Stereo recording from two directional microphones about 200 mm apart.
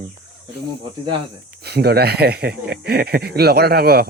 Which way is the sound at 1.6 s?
55° right (ahead or behind).